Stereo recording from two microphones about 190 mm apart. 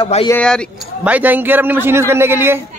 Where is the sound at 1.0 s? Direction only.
10° right (ahead or behind).